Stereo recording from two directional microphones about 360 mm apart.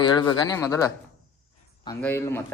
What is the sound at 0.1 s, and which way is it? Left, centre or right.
Speech, centre.